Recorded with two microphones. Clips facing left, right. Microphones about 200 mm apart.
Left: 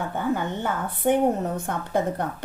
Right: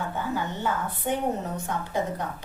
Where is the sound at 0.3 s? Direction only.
55° left (ahead or behind).